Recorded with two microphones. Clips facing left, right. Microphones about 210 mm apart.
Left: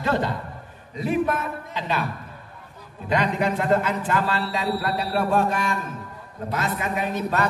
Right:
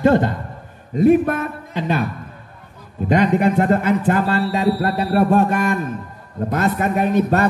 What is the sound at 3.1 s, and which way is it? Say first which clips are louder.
A man's voice: right 7 dB; 55° right (ahead or behind).